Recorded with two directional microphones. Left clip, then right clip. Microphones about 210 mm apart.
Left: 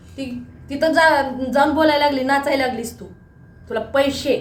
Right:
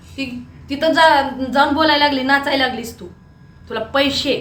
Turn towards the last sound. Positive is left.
turn(degrees=5)  # may be behind; listen again after turning